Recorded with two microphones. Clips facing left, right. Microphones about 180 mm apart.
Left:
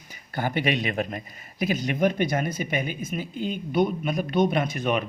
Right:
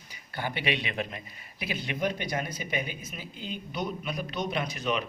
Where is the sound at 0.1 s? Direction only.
45° left (ahead or behind).